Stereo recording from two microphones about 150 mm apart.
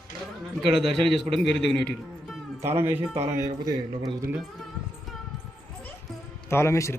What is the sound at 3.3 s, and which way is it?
Speech, 20° right (ahead or behind).